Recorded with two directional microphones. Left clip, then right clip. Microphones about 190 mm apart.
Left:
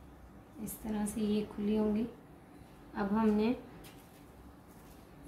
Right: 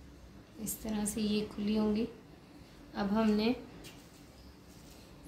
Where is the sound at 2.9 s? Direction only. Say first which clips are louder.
Even; 35° right (ahead or behind).